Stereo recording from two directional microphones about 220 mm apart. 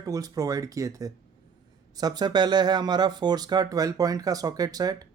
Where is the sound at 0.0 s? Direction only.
15° right (ahead or behind).